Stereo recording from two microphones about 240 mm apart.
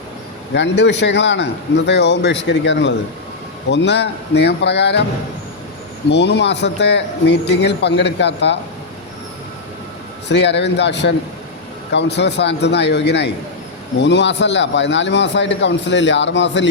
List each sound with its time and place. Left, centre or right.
0.5 s a man's voice: left
6.1 s a man's voice: left
10.2 s a man's voice: left